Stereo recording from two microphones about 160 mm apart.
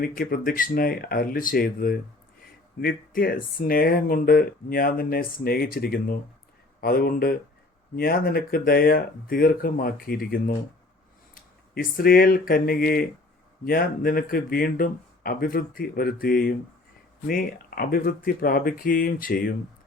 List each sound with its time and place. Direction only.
0.0 s speech: 60° left (ahead or behind)